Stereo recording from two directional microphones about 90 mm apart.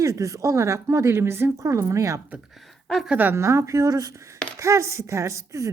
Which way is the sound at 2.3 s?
5° right (ahead or behind).